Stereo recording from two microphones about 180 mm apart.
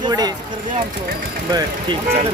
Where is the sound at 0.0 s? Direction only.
20° right (ahead or behind).